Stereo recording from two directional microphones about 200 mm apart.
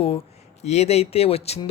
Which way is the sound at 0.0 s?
30° left (ahead or behind).